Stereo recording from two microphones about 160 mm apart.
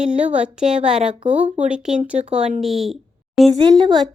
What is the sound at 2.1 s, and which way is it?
Speech, 40° right (ahead or behind).